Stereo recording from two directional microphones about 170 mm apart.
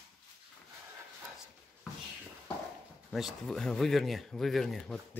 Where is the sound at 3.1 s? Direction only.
Centre (ahead or behind).